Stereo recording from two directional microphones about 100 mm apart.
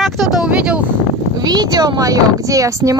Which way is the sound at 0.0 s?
Centre (ahead or behind).